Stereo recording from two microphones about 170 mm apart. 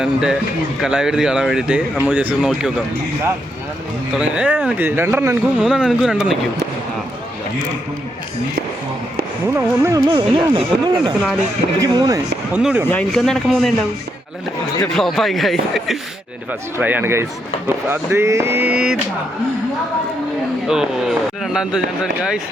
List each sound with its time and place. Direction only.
0.0 s speech: 5° right (ahead or behind)
4.2 s speech: 5° right (ahead or behind)
5.6 s speech: 5° right (ahead or behind)
9.5 s speech: 15° right (ahead or behind)
10.3 s speech: 30° right (ahead or behind)
12.5 s speech: 5° right (ahead or behind)
12.9 s speech: 5° left (ahead or behind)
14.9 s speech: centre (ahead or behind)
16.5 s speech: 10° right (ahead or behind)
20.7 s speech: centre (ahead or behind)